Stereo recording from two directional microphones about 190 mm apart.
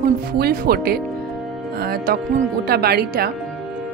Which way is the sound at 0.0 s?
55° right (ahead or behind).